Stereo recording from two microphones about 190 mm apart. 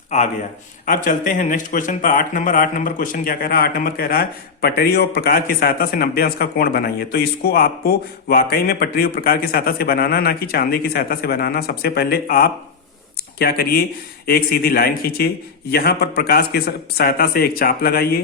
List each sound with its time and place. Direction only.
0.9 s speech: 45° left (ahead or behind)